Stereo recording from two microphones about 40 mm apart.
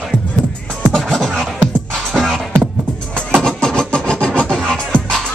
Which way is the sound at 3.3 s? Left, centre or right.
Centre.